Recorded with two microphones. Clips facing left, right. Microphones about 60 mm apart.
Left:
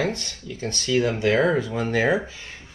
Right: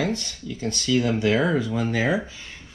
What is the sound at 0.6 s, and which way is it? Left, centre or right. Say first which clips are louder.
Speech: even; left.